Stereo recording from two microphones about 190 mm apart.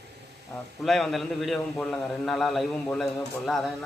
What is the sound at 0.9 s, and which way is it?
A man's voice, centre (ahead or behind).